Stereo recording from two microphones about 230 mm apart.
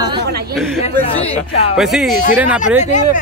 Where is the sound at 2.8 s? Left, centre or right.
Left.